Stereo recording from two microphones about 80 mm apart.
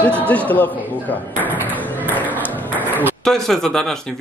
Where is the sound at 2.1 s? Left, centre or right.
Left.